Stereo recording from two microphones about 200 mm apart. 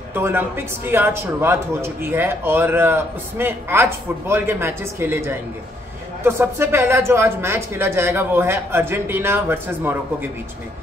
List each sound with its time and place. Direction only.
0.1 s a man's voice: 10° right (ahead or behind)